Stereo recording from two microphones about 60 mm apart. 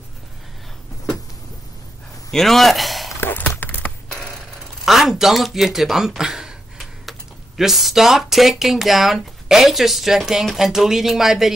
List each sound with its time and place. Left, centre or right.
2.3 s a man's voice: centre
3.2 s a sound: left
4.8 s speech: centre